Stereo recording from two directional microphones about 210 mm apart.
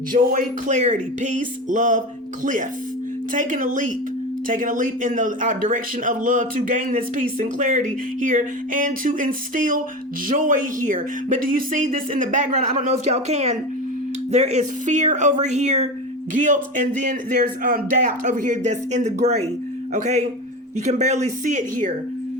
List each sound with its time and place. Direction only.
0.1 s a man's voice: 40° right (ahead or behind)